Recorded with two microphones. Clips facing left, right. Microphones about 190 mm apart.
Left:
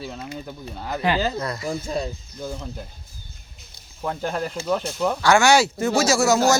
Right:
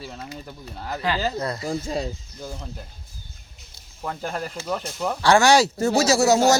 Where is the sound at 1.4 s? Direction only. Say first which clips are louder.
Even; 30° right (ahead or behind).